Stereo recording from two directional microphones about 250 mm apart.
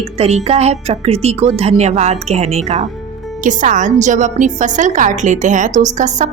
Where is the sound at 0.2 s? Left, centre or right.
Right.